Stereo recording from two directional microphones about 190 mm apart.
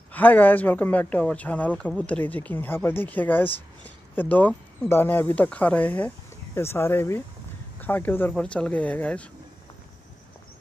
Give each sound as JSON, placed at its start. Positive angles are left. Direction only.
{"t": 0.1, "sound": "a man's voice", "side_deg": 10}